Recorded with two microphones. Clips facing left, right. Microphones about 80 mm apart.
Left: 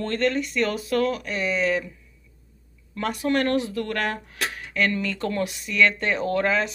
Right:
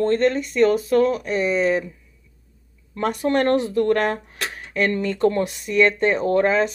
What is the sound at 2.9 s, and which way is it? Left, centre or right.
A woman's voice, right.